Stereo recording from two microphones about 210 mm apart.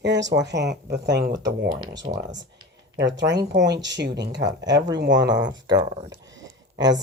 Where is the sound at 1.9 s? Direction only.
20° right (ahead or behind).